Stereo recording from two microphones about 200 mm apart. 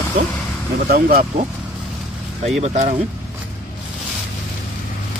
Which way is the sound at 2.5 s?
35° right (ahead or behind).